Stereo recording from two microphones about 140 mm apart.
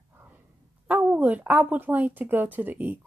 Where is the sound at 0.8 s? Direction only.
10° right (ahead or behind).